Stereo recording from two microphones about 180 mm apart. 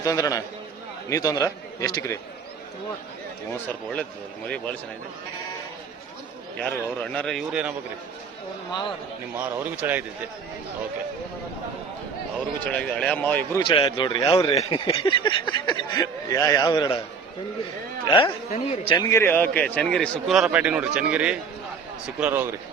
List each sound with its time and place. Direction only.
0.0 s speech: 20° left (ahead or behind)
4.4 s speech: 5° left (ahead or behind)
6.6 s a man's voice: 5° left (ahead or behind)
9.4 s speech: 10° right (ahead or behind)
12.7 s speech: 5° left (ahead or behind)
13.7 s speech: 30° left (ahead or behind)
18.2 s a man's voice: 30° left (ahead or behind)
19.0 s a man's voice: 15° left (ahead or behind); by 22.4 s 10° right (ahead or behind)